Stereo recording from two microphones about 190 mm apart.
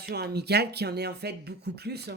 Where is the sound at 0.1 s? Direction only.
60° right (ahead or behind).